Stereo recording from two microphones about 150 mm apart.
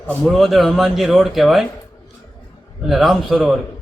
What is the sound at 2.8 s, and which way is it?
Speech, centre (ahead or behind).